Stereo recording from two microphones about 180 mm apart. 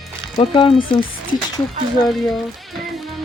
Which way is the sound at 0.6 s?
30° left (ahead or behind).